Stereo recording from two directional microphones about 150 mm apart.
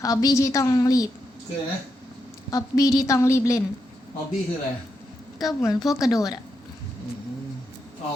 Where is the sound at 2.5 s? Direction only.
25° left (ahead or behind).